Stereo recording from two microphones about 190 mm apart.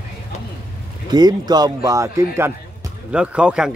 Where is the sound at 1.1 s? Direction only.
20° right (ahead or behind).